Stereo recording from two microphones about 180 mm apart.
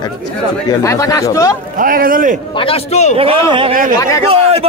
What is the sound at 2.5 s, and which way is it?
Speech, 30° left (ahead or behind).